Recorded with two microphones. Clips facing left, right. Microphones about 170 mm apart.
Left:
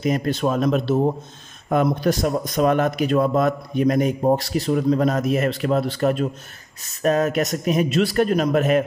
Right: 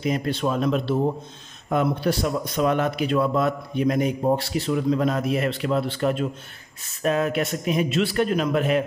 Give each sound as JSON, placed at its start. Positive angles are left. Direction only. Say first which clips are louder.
{"t": 0.0, "sound": "a man's voice", "louder": "left 3 dB", "side_deg": 45}